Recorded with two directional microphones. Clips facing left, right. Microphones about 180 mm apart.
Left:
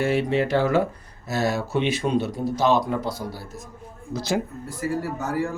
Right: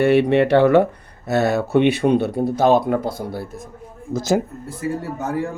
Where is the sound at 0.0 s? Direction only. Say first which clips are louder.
Right 7 dB; 65° right (ahead or behind); by 4.4 s 45° right (ahead or behind).